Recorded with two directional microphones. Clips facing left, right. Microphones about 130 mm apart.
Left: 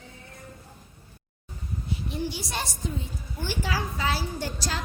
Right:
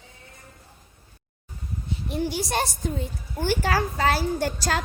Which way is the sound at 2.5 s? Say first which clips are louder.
Right 6 dB; 55° right (ahead or behind).